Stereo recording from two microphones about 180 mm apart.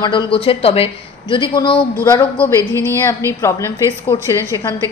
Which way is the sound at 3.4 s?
15° left (ahead or behind).